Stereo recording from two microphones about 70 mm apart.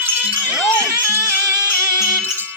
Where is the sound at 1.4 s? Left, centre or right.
Right.